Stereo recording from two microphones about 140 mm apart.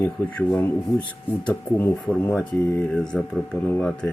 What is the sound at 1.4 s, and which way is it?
Speech, 10° left (ahead or behind).